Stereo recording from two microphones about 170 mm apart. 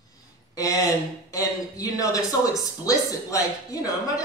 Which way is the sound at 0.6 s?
20° left (ahead or behind).